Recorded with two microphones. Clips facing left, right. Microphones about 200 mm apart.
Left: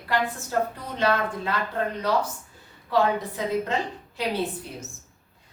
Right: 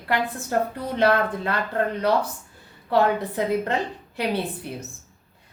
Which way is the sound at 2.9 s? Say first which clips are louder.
Right 2 dB; 60° right (ahead or behind).